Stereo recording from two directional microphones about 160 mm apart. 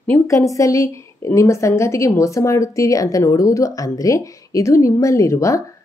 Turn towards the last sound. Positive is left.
turn(degrees=20)  # may be behind; listen again after turning